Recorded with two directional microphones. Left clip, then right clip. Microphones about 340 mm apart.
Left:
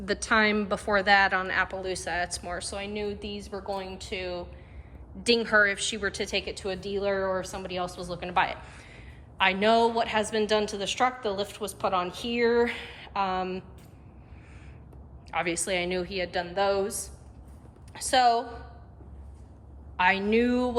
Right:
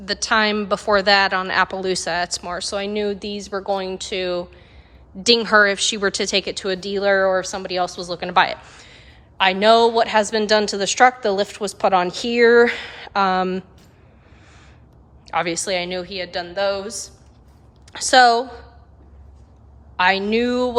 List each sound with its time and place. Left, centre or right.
0.0 s a woman's voice: centre
15.3 s a woman's voice: centre
17.9 s a woman's voice: centre
20.0 s a woman's voice: centre